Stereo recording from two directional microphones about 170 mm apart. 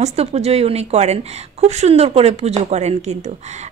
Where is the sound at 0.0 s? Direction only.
40° right (ahead or behind).